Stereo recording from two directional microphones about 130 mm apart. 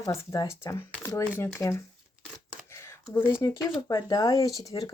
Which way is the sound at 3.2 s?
30° left (ahead or behind).